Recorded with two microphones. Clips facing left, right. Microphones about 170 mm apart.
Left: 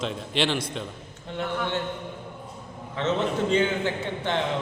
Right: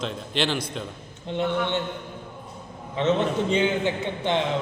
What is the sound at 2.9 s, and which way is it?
A man's voice, 20° right (ahead or behind).